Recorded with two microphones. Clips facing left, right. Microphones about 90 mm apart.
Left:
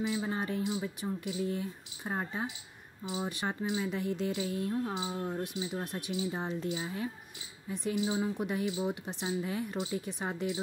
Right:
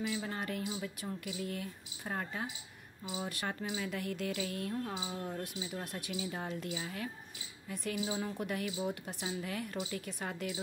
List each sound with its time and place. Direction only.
0.0 s speech: 20° left (ahead or behind)